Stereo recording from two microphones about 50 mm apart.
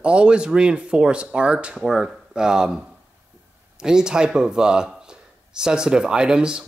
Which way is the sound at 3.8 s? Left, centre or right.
Centre.